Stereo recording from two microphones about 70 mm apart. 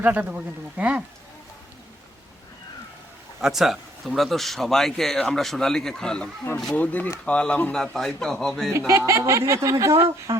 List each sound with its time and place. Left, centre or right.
0.0 s speech: right
3.4 s speech: centre
6.7 s speech: left
7.8 s speech: centre
9.0 s speech: right